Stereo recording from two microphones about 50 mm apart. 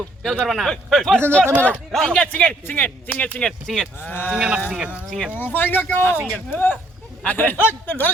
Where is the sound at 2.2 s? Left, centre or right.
Left.